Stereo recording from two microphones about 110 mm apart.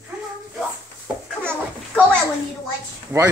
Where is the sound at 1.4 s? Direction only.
20° right (ahead or behind).